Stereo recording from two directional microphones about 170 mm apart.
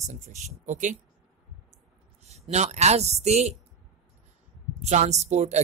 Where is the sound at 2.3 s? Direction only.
40° right (ahead or behind).